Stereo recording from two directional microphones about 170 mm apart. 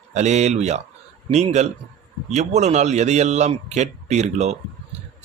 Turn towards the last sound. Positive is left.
turn(degrees=-40)  # may be behind; listen again after turning